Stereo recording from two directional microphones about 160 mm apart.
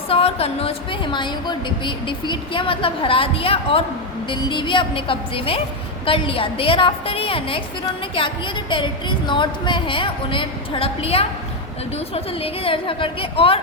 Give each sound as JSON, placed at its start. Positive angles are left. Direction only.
{"t": 0.1, "sound": "a woman's voice", "side_deg": 40}
{"t": 8.7, "sound": "a woman's voice", "side_deg": 30}